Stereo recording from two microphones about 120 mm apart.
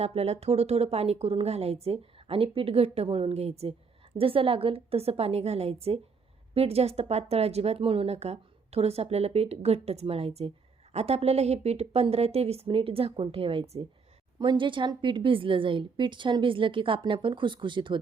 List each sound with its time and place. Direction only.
0.0 s speech: 60° right (ahead or behind)
14.3 s speech: 40° right (ahead or behind)